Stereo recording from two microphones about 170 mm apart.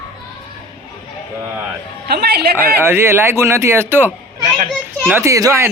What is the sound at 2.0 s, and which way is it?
Speech, 70° right (ahead or behind).